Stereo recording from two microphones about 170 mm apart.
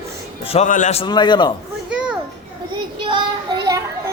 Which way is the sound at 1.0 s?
25° left (ahead or behind).